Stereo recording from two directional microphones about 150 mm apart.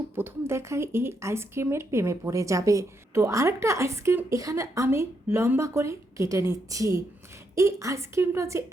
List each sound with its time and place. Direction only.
0.2 s speech: 15° right (ahead or behind)